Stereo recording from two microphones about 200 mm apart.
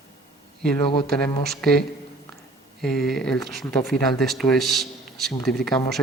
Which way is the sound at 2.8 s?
Centre (ahead or behind).